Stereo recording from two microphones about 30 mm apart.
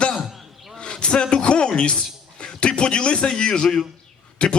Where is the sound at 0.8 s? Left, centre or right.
Left.